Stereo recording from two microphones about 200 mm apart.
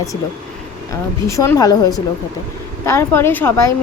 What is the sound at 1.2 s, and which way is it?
A woman's voice, 15° left (ahead or behind).